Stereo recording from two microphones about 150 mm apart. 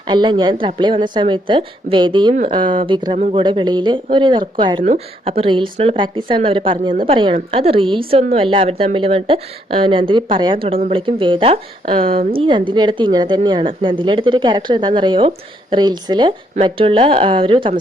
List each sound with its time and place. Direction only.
0.1 s a woman's voice: 30° right (ahead or behind)